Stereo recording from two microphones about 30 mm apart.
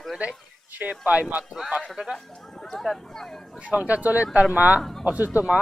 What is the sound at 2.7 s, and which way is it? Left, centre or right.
Speech, centre.